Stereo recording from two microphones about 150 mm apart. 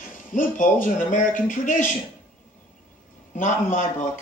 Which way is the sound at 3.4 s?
60° left (ahead or behind).